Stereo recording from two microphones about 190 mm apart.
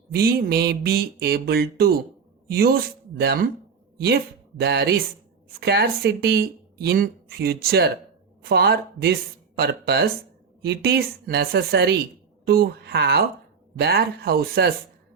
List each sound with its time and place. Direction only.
0.1 s a woman's voice: 55° right (ahead or behind)
4.6 s speech: 60° right (ahead or behind)